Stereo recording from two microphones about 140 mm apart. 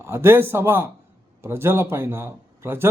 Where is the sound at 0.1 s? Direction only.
20° right (ahead or behind).